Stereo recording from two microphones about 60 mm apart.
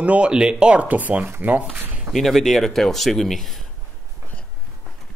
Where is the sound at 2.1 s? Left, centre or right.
Centre.